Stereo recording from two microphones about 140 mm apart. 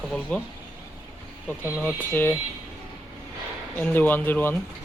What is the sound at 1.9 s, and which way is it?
Speech, 15° left (ahead or behind).